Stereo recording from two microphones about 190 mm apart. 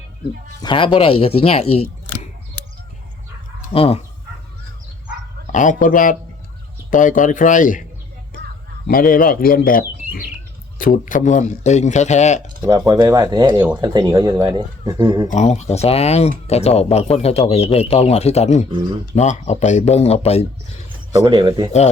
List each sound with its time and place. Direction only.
0.6 s speech: 25° left (ahead or behind)
3.7 s speech: 30° left (ahead or behind)
5.5 s speech: 40° left (ahead or behind)
8.9 s speech: 50° left (ahead or behind)
12.5 s speech: 25° right (ahead or behind)
15.3 s speech: 35° left (ahead or behind)
21.2 s speech: 20° right (ahead or behind)